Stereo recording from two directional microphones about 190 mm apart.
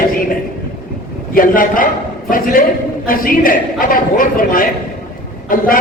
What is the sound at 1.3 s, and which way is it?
A woman's voice, 45° left (ahead or behind).